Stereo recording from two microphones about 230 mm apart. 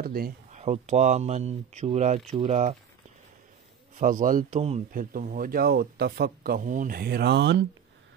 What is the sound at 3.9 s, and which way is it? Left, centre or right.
Speech, right.